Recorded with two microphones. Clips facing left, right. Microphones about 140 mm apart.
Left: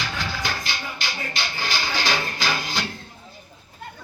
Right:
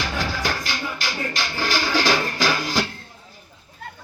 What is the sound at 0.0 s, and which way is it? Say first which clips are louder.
Music: right 3 dB; 40° right (ahead or behind).